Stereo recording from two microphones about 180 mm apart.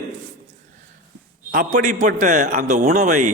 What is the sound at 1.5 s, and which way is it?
A man's voice, 45° right (ahead or behind).